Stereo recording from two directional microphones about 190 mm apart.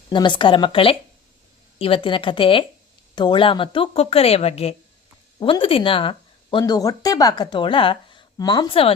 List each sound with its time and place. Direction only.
0.1 s a woman's voice: 25° left (ahead or behind)